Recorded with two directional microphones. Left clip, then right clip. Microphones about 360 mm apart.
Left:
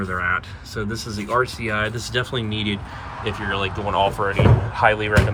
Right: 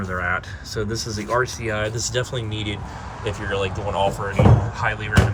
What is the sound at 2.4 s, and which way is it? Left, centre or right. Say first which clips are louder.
Speech: left 3 dB; centre.